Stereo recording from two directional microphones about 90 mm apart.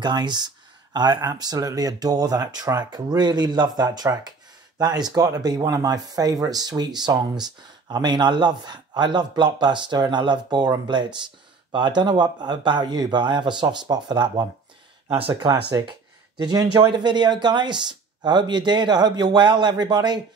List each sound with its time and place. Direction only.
0.0 s speech: 55° right (ahead or behind)